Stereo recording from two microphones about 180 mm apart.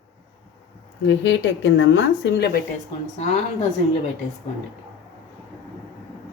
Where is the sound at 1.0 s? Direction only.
90° left; by 2.6 s 65° left (ahead or behind).